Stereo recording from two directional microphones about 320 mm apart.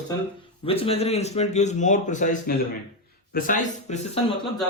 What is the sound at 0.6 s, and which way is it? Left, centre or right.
A man's voice, centre.